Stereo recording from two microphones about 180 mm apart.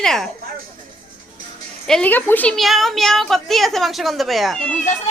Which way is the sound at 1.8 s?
5° left (ahead or behind).